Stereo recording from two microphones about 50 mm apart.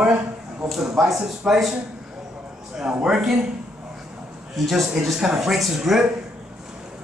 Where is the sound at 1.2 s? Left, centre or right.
Centre.